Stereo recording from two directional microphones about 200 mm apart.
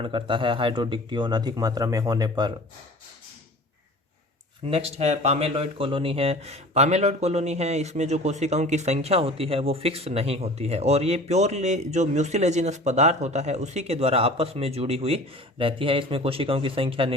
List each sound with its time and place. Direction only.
0.0 s speech: 25° right (ahead or behind)
4.7 s speech: 30° right (ahead or behind)